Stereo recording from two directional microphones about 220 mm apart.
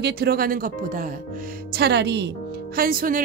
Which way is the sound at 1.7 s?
50° right (ahead or behind).